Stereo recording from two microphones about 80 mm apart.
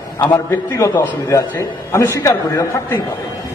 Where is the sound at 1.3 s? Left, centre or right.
Left.